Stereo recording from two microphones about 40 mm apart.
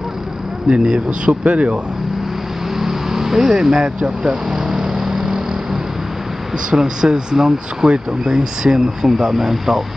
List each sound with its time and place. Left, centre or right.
0.7 s speech: right
2.7 s vehicle: centre
4.0 s speech: right
4.5 s vehicle: centre
6.8 s speech: centre